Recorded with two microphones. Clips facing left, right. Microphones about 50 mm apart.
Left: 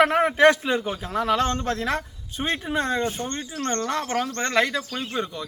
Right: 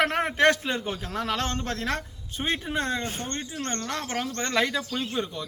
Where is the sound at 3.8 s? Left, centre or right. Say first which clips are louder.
Left 5 dB; centre.